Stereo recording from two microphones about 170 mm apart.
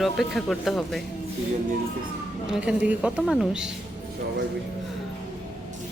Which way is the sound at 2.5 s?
5° right (ahead or behind).